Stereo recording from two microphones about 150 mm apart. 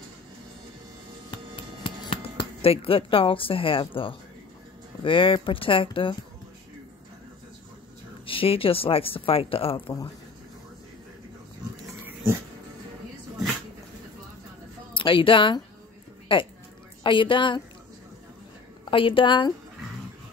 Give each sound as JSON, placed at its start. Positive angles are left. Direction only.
{"t": 1.3, "sound": "a sound", "side_deg": 30}
{"t": 5.0, "sound": "speech", "side_deg": 35}
{"t": 8.3, "sound": "speech", "side_deg": 35}
{"t": 15.0, "sound": "speech", "side_deg": 35}
{"t": 18.9, "sound": "speech", "side_deg": 35}